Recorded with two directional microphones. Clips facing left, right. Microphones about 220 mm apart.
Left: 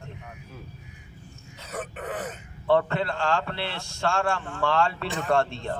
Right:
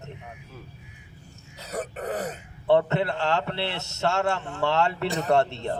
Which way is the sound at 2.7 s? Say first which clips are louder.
Right 2 dB; 20° right (ahead or behind).